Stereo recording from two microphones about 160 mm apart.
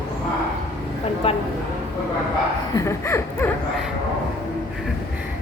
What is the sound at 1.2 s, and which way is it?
Speech, 35° left (ahead or behind).